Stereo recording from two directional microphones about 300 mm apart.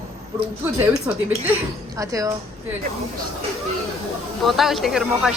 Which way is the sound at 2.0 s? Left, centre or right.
Centre.